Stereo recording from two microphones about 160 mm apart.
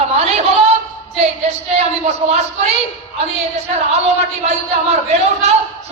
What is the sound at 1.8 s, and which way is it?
Speech, 40° right (ahead or behind).